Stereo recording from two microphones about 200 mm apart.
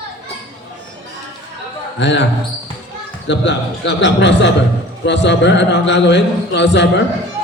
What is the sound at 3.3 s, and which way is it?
A man's voice, 60° left (ahead or behind).